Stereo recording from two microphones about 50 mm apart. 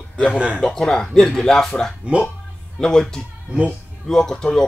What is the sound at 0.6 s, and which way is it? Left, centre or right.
Speech, centre.